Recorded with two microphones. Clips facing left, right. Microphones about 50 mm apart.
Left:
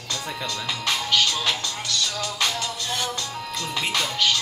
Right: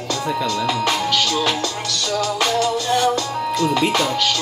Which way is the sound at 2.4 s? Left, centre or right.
Right.